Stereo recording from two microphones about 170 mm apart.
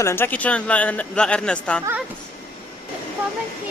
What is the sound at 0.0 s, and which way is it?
Speech, 15° left (ahead or behind).